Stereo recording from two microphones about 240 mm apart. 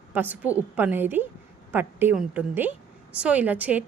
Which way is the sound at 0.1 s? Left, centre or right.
Centre.